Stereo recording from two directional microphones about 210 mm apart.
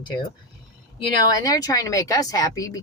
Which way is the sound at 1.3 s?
15° left (ahead or behind).